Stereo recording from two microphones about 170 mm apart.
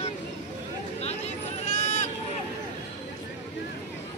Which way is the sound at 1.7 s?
45° left (ahead or behind).